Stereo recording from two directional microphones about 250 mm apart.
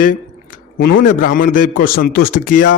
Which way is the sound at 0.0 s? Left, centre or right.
Left.